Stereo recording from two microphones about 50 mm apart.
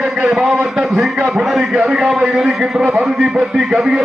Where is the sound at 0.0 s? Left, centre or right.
Centre.